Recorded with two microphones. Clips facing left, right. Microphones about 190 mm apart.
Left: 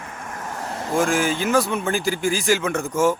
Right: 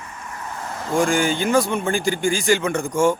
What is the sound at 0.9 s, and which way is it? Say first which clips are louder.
A man's voice: right 1 dB; centre (ahead or behind).